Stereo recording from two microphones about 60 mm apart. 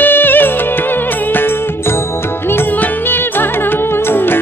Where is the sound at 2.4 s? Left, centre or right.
Left.